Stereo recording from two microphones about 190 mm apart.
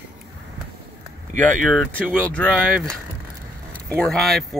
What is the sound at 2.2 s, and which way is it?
Speech, 5° left (ahead or behind).